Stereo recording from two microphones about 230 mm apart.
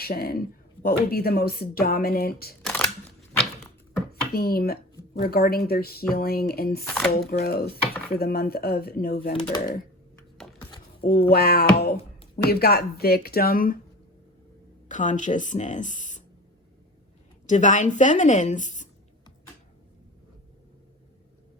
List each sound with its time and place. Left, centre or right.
0.0 s a woman's voice: left
2.6 s camera: centre
4.1 s a woman's voice: left
6.8 s speech: centre
7.1 s a woman's voice: left
11.0 s a woman's voice: left
14.8 s speech: left
17.4 s a woman's voice: left